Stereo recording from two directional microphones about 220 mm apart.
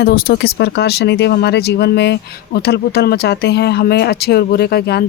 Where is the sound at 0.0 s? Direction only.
40° left (ahead or behind).